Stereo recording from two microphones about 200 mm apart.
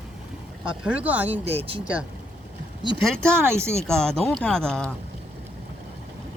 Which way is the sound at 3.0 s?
5° left (ahead or behind).